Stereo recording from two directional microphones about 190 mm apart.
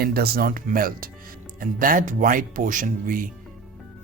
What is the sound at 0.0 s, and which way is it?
Speech, 55° right (ahead or behind).